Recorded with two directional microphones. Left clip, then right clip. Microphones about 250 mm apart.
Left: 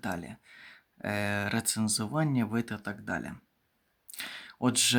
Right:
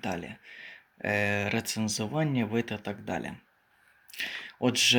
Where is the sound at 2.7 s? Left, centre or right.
Left.